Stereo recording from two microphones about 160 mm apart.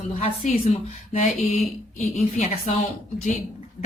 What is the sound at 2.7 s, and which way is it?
Speech, 45° left (ahead or behind).